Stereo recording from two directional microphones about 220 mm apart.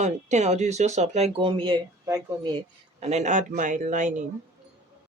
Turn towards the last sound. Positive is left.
turn(degrees=-35)  # may be behind; listen again after turning